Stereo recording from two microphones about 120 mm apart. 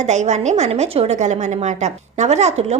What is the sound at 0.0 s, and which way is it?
A woman's voice, 75° right (ahead or behind).